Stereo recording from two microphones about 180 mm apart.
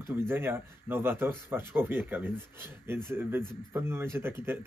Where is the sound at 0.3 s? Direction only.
10° right (ahead or behind).